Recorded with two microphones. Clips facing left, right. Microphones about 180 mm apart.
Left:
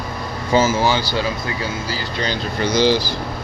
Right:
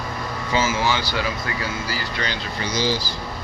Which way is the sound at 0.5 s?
40° left (ahead or behind).